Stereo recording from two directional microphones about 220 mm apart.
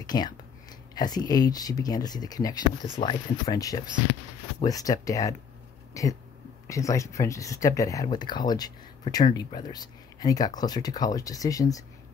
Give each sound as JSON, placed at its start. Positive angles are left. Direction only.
{"t": 0.0, "sound": "speech", "side_deg": 20}